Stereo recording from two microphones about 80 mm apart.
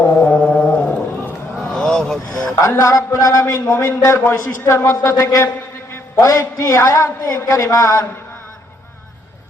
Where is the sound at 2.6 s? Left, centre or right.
Left.